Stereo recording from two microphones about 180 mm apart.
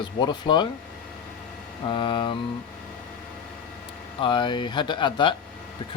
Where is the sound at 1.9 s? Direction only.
30° left (ahead or behind).